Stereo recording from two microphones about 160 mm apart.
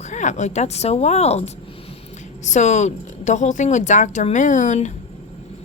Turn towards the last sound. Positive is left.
turn(degrees=50)  # may be behind; listen again after turning